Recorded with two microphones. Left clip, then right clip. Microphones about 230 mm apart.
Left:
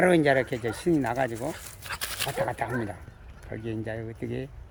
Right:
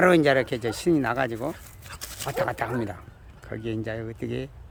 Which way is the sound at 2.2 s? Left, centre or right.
Centre.